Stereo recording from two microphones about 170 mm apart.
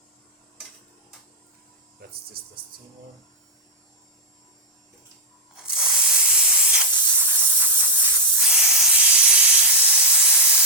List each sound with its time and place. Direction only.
2.4 s speech: 60° right (ahead or behind)
5.6 s spray: 5° right (ahead or behind)